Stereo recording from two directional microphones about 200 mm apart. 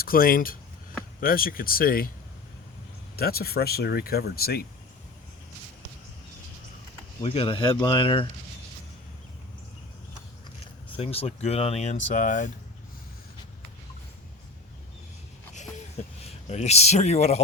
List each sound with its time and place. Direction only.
0.0 s speech: 45° left (ahead or behind)
3.2 s speech: 50° left (ahead or behind)
7.2 s speech: 25° left (ahead or behind)
10.9 s speech: 30° left (ahead or behind)
16.2 s speech: 35° left (ahead or behind)